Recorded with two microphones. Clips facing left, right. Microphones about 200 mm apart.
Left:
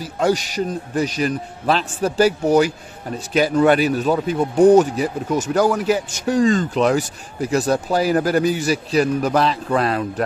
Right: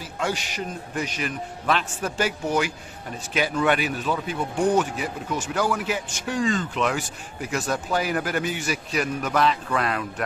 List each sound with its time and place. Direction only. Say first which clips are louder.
0.0 s speech: left 9 dB; 40° left (ahead or behind)